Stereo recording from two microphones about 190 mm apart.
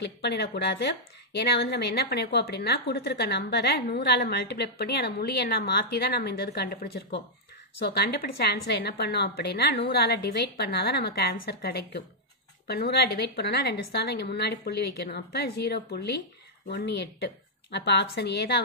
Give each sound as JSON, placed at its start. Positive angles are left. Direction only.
{"t": 0.0, "sound": "a woman's voice", "side_deg": 60}